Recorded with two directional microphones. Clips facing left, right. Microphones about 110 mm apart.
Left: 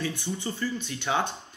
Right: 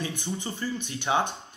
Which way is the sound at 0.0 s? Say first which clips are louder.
Left 1 dB; 15° right (ahead or behind).